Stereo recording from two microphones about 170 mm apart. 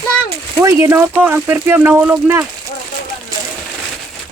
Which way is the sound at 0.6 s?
20° right (ahead or behind).